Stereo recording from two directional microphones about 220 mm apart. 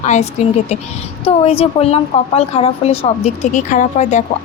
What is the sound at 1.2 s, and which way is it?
A woman's voice, 25° left (ahead or behind).